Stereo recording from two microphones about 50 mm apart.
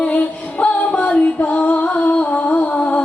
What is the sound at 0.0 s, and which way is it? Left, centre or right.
Music, left.